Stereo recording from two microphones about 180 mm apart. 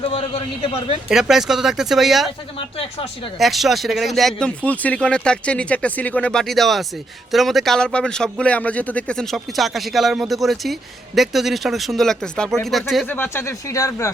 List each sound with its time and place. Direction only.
1.0 s speech: centre (ahead or behind)
3.3 s speech: centre (ahead or behind)
13.1 s speech: 10° left (ahead or behind)